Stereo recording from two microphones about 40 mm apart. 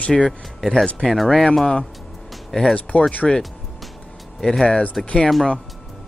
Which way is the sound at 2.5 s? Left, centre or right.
Centre.